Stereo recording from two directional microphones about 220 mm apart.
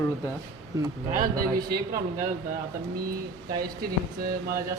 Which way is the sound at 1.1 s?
40° right (ahead or behind).